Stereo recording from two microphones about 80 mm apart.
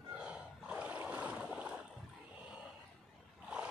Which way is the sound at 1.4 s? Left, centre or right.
Centre.